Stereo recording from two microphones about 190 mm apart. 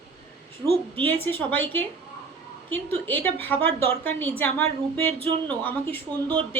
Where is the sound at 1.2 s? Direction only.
10° left (ahead or behind).